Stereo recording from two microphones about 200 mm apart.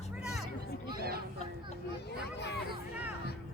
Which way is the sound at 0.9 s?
50° right (ahead or behind).